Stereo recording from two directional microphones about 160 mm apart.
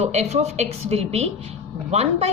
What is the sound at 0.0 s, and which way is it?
A woman's voice, 45° right (ahead or behind).